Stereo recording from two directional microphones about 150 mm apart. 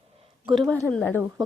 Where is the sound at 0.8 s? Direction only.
15° left (ahead or behind).